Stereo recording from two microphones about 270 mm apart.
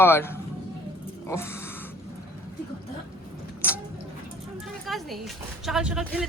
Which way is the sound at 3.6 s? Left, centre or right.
Centre.